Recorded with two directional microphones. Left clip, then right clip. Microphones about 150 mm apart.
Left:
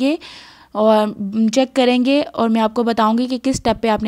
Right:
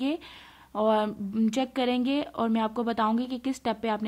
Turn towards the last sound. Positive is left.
turn(degrees=45)  # may be behind; listen again after turning